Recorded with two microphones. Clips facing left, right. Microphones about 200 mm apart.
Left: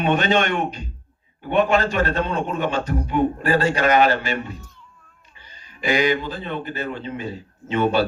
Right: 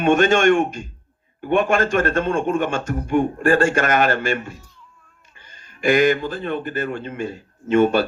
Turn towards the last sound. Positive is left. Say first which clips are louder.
# right 4 dB
turn(degrees=-50)  # may be behind; listen again after turning